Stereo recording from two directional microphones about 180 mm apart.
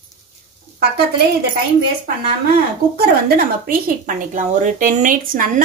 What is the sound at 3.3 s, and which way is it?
A woman's voice, 55° right (ahead or behind).